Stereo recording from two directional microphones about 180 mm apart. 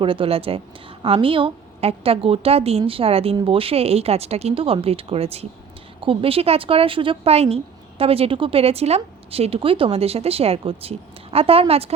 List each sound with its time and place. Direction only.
0.0 s speech: 30° right (ahead or behind)